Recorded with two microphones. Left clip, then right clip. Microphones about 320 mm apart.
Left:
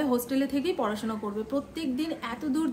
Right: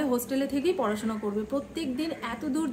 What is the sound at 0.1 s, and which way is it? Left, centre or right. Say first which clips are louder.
A woman's voice: left 1 dB; centre.